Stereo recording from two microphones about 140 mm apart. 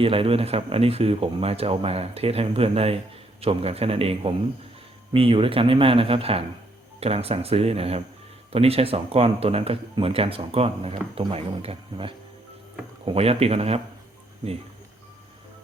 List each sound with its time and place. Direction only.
0.0 s speech: 40° right (ahead or behind)